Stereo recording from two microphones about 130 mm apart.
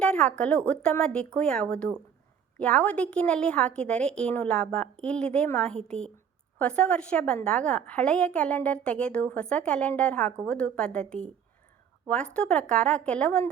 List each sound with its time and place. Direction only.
0.0 s a woman's voice: 10° left (ahead or behind)